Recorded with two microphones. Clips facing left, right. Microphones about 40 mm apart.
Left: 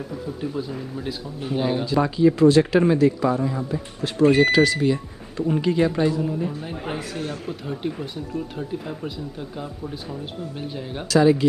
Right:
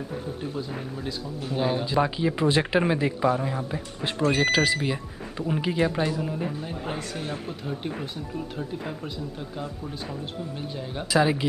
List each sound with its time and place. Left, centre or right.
0.6 s speech: centre
1.9 s speech: centre
4.3 s speech: centre
6.6 s speech: centre
11.1 s speech: centre